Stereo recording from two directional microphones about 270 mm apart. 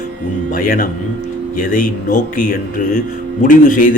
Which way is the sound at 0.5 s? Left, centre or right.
Left.